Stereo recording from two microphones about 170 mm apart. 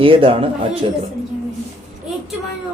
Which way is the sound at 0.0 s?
30° right (ahead or behind).